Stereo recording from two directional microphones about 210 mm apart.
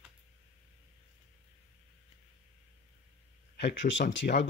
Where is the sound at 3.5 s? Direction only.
60° left (ahead or behind).